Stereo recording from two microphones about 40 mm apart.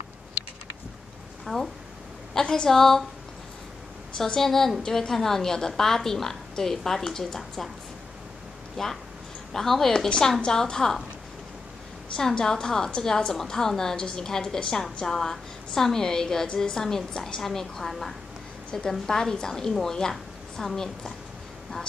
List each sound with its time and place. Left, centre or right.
1.4 s speech: centre
2.4 s a woman's voice: left
2.7 s a woman's voice: centre
4.4 s a woman's voice: centre
8.8 s a woman's voice: centre
12.4 s a woman's voice: left
13.3 s a woman's voice: centre